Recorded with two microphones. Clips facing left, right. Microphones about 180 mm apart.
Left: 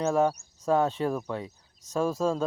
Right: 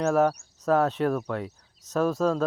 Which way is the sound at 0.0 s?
Centre (ahead or behind).